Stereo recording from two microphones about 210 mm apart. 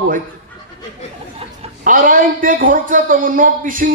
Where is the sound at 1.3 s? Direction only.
40° right (ahead or behind).